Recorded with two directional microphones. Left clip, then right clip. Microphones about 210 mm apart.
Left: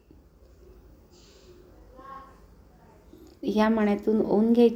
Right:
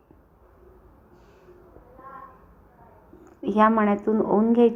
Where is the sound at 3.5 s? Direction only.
20° left (ahead or behind).